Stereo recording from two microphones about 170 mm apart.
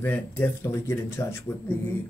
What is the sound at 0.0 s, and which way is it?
Speech, 10° left (ahead or behind).